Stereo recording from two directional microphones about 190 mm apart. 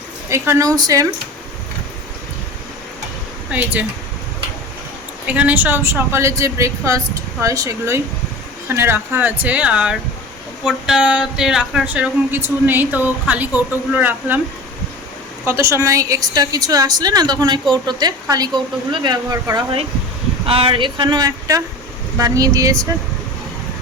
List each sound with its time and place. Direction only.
0.3 s a woman's voice: 15° right (ahead or behind)
3.5 s a woman's voice: 10° right (ahead or behind)
5.2 s a woman's voice: 5° right (ahead or behind)
15.4 s a woman's voice: 15° right (ahead or behind)